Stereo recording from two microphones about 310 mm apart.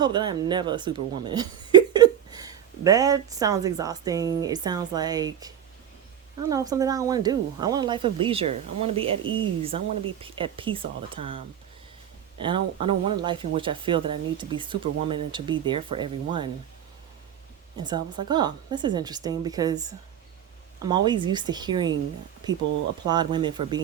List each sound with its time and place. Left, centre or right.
0.0 s speech: centre
17.7 s speech: centre
20.8 s speech: centre